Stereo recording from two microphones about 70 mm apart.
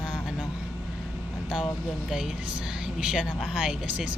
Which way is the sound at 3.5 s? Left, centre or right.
Centre.